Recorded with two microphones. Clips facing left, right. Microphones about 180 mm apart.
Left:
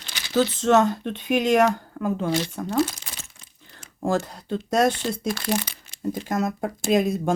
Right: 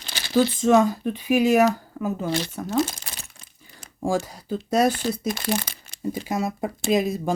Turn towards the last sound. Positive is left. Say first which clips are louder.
# left 1 dB
turn(degrees=0)  # may be behind; listen again after turning